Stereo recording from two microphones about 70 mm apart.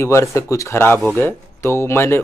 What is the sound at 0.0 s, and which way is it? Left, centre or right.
Speech, left.